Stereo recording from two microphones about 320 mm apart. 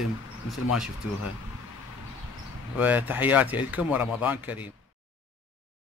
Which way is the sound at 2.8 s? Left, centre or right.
Centre.